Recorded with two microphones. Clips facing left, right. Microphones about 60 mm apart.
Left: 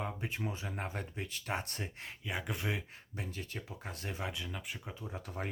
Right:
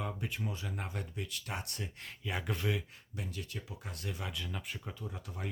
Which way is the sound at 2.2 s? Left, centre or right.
Centre.